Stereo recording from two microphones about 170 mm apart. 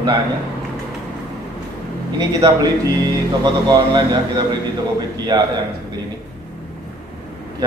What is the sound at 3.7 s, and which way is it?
Speech, 25° right (ahead or behind).